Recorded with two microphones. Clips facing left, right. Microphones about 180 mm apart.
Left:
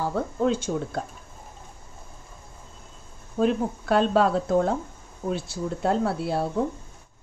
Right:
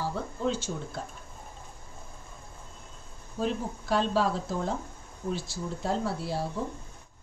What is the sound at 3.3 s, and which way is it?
Speech, 60° left (ahead or behind).